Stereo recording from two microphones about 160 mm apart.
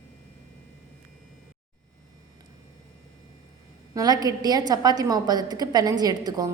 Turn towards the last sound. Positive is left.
turn(degrees=-25)  # may be behind; listen again after turning